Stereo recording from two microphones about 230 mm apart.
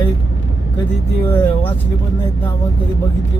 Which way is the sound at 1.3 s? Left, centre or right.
Centre.